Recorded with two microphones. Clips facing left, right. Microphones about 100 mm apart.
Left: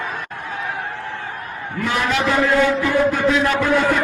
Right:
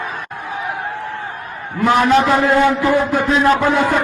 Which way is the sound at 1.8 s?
35° right (ahead or behind).